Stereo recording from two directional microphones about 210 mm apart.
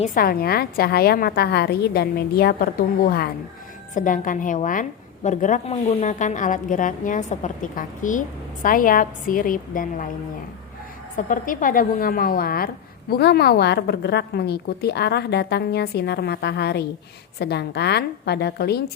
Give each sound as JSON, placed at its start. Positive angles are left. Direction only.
{"t": 0.0, "sound": "a woman's voice", "side_deg": 40}
{"t": 11.3, "sound": "a woman's voice", "side_deg": 40}